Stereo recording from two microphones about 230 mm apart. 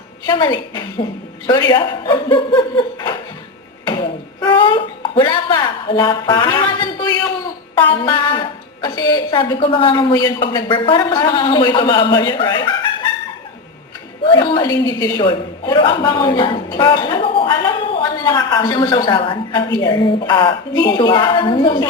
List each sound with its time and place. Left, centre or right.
0.3 s a woman's voice: centre
14.3 s a woman's voice: left